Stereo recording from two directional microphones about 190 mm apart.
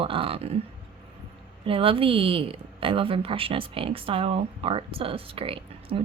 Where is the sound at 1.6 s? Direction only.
30° right (ahead or behind).